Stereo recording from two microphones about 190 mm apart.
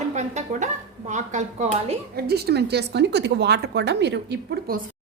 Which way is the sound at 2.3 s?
55° right (ahead or behind).